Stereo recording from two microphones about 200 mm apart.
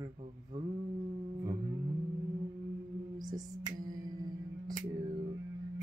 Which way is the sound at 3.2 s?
20° right (ahead or behind).